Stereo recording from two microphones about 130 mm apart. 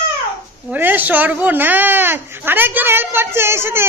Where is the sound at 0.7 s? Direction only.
15° right (ahead or behind).